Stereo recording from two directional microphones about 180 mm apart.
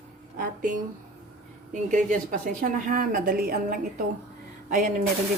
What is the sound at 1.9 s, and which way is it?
A woman's voice, 50° right (ahead or behind).